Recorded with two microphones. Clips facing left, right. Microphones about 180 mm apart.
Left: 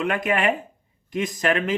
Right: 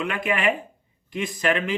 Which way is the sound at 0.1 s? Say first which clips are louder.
Left 1 dB; 45° left (ahead or behind).